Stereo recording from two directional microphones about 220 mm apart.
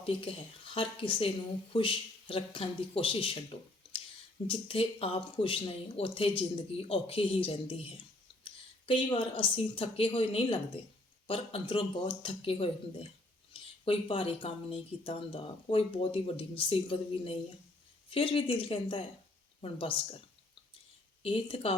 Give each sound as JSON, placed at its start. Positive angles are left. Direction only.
{"t": 0.0, "sound": "speech", "side_deg": 25}
{"t": 8.4, "sound": "a sound", "side_deg": 25}
{"t": 9.7, "sound": "speech", "side_deg": 25}
{"t": 21.2, "sound": "speech", "side_deg": 25}